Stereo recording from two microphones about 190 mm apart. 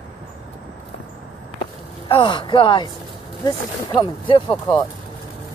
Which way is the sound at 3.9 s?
30° left (ahead or behind).